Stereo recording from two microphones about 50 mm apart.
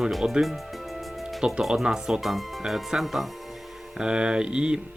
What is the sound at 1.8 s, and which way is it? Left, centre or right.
Speech, centre.